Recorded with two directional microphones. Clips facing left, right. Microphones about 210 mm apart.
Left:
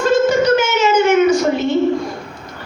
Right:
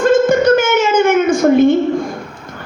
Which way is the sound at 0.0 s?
50° right (ahead or behind).